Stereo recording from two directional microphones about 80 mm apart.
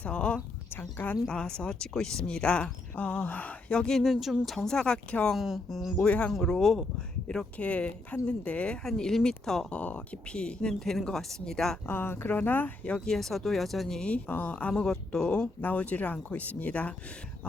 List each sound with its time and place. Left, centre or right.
0.0 s a sound: centre
1.3 s speech: centre
5.4 s speech: centre
6.0 s speech: centre
7.3 s speech: centre
11.9 s speech: left; by 14.2 s centre
14.3 s speech: left
14.7 s speech: centre